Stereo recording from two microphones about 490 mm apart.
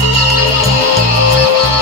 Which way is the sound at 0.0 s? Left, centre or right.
Right.